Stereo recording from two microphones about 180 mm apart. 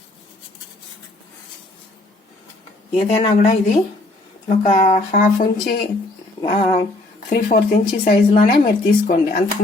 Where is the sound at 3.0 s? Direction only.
35° left (ahead or behind).